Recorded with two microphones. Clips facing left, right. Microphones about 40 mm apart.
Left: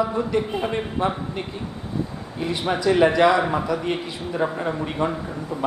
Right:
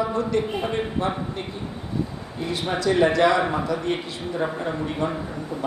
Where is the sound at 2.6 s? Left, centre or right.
Centre.